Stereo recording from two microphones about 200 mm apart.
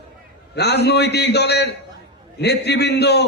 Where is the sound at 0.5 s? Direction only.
55° left (ahead or behind).